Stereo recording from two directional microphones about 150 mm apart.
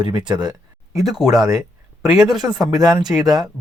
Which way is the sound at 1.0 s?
Centre (ahead or behind).